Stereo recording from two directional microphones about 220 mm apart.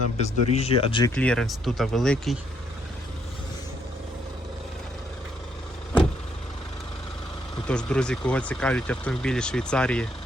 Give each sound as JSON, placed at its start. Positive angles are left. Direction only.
{"t": 0.2, "sound": "speech", "side_deg": 30}
{"t": 1.1, "sound": "speech", "side_deg": 5}
{"t": 7.7, "sound": "speech", "side_deg": 5}